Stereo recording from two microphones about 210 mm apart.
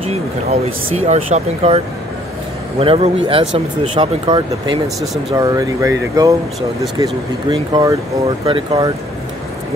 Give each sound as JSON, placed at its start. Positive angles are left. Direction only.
{"t": 0.1, "sound": "speech", "side_deg": -30}
{"t": 2.8, "sound": "speech", "side_deg": -25}
{"t": 4.8, "sound": "speech", "side_deg": 0}
{"t": 5.3, "sound": "speech", "side_deg": -15}